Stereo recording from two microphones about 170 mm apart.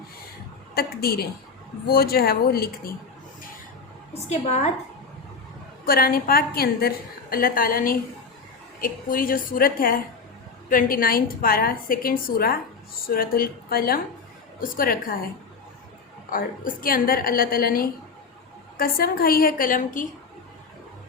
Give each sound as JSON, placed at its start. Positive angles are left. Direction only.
{"t": 0.7, "sound": "a woman's voice", "side_deg": 65}
{"t": 4.1, "sound": "a woman's voice", "side_deg": 40}
{"t": 5.8, "sound": "a woman's voice", "side_deg": 60}
{"t": 16.3, "sound": "a woman's voice", "side_deg": 55}